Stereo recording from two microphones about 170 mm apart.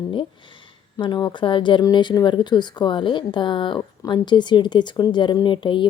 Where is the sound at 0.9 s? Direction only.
25° left (ahead or behind).